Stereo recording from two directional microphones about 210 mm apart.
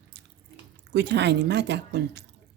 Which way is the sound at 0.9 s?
55° right (ahead or behind).